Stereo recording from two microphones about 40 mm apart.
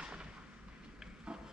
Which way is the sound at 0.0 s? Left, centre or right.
Right.